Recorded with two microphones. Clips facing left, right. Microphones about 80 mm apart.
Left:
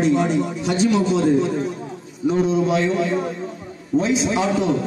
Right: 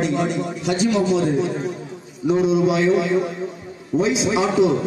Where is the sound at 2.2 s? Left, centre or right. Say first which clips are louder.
Right 1 dB; centre.